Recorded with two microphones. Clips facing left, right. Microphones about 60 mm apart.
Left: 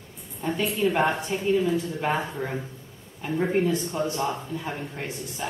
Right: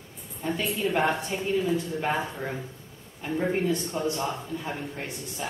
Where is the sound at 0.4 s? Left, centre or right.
Centre.